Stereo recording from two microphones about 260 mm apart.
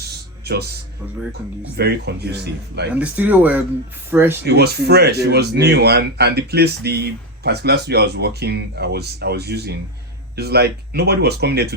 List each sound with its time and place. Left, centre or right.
1.3 s speech: right
2.9 s speech: centre
4.4 s speech: right